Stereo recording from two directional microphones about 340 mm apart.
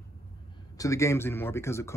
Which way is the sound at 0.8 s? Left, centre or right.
Centre.